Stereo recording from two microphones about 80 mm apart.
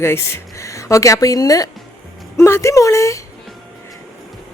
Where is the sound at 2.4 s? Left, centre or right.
Left.